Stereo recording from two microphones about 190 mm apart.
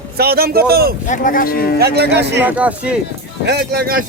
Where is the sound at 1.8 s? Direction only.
60° right (ahead or behind).